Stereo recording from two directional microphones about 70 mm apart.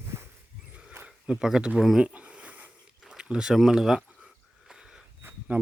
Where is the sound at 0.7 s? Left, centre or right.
Centre.